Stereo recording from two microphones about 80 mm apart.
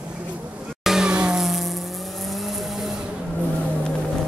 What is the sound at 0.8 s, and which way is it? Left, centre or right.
Vehicle, centre.